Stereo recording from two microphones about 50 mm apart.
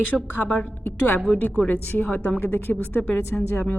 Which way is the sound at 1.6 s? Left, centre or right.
Left.